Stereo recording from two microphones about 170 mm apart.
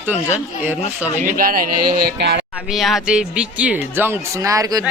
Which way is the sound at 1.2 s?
55° right (ahead or behind).